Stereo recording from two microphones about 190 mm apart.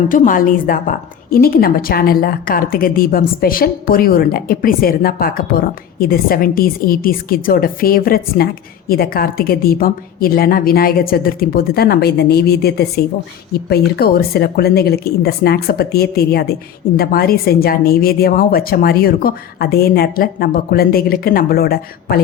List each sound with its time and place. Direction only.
0.1 s a woman's voice: 45° left (ahead or behind)